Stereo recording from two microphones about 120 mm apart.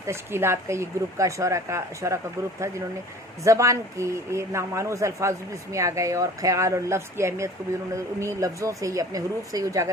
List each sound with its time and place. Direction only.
0.0 s speech: 20° right (ahead or behind)
3.4 s speech: 25° right (ahead or behind)